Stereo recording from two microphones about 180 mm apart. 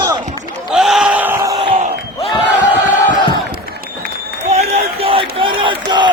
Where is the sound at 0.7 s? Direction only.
5° right (ahead or behind).